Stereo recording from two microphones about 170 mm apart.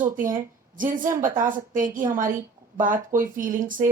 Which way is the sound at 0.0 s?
50° right (ahead or behind).